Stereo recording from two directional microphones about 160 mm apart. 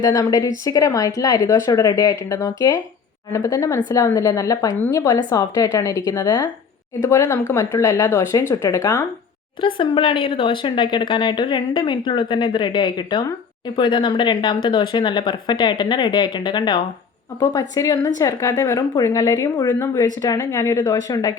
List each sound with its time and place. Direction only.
0.0 s speech: 25° left (ahead or behind)
9.6 s speech: 30° left (ahead or behind)